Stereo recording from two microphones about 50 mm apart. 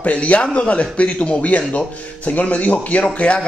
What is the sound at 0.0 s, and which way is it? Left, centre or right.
Speech, left.